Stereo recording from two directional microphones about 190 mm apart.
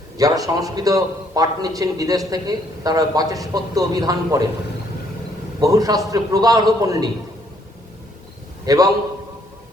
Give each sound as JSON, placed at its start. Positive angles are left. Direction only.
{"t": 0.2, "sound": "a man's voice", "side_deg": -20}
{"t": 5.5, "sound": "a man's voice", "side_deg": -20}
{"t": 8.6, "sound": "a man's voice", "side_deg": -20}